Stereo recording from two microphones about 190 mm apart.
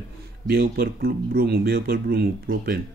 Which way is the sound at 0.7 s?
50° right (ahead or behind).